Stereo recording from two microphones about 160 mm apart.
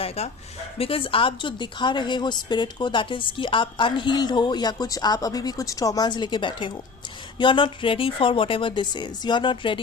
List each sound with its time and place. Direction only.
0.2 s a woman's voice: 40° left (ahead or behind)